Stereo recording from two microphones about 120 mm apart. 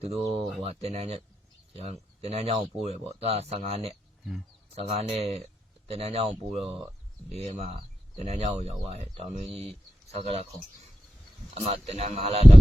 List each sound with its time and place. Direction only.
0.0 s speech: 55° right (ahead or behind)
11.5 s speech: 60° right (ahead or behind)